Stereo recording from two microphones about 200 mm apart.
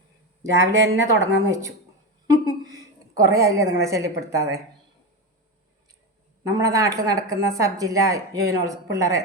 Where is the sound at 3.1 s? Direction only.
15° right (ahead or behind).